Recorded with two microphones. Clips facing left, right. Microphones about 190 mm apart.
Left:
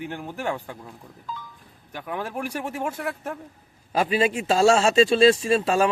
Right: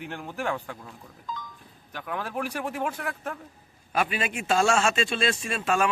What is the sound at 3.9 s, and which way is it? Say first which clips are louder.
A man's voice: left 6 dB; 30° left (ahead or behind).